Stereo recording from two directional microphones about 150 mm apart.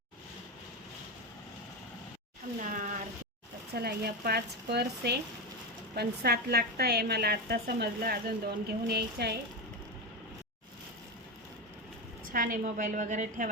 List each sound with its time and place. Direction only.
2.6 s a sound: 60° right (ahead or behind)
3.8 s a woman's voice: 90° right
12.3 s a woman's voice: 70° right (ahead or behind); by 13.5 s 55° right (ahead or behind)